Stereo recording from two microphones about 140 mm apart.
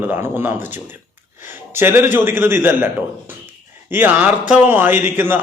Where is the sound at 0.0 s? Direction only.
15° right (ahead or behind).